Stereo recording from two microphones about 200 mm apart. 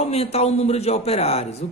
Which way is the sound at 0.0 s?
30° left (ahead or behind).